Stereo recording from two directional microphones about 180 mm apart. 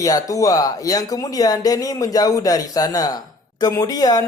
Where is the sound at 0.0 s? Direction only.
20° left (ahead or behind).